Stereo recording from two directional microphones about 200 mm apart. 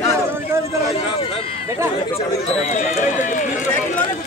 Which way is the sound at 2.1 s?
35° left (ahead or behind).